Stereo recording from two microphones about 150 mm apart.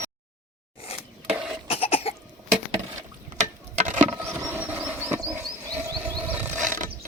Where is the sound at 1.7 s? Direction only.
40° left (ahead or behind).